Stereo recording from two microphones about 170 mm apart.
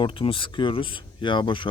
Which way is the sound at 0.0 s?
30° left (ahead or behind).